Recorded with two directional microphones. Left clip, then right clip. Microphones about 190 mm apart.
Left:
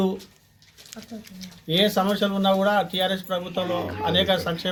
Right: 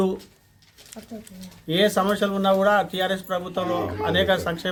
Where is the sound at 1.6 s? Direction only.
10° left (ahead or behind).